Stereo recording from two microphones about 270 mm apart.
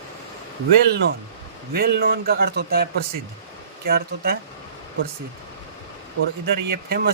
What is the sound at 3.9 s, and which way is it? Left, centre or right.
Speech, right.